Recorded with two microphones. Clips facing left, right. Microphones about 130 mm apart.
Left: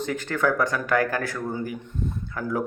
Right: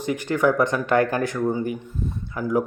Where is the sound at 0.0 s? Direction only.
15° right (ahead or behind).